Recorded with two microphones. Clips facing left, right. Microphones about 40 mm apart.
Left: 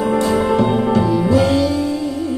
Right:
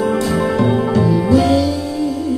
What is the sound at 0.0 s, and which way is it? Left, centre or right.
Music, left.